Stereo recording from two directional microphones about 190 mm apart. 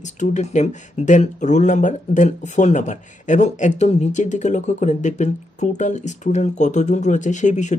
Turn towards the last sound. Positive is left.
turn(degrees=40)  # may be behind; listen again after turning